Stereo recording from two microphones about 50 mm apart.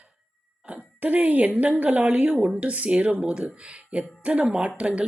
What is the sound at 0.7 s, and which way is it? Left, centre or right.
Speech, right.